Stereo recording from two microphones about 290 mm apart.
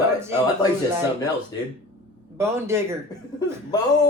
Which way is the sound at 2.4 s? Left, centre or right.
Centre.